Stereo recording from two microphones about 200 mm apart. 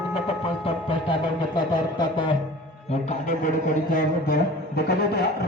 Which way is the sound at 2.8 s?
35° left (ahead or behind).